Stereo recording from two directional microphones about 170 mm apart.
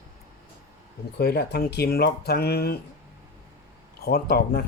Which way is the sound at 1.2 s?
70° left (ahead or behind).